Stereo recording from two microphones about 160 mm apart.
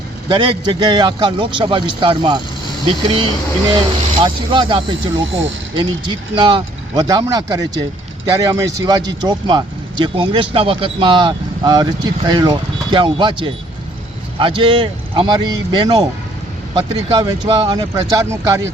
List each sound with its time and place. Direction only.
0.3 s speech: 30° right (ahead or behind)